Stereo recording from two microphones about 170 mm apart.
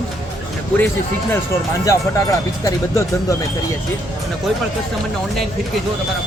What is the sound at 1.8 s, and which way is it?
Speech, 20° left (ahead or behind).